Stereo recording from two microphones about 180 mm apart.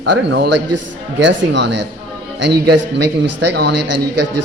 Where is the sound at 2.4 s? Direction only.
65° right (ahead or behind).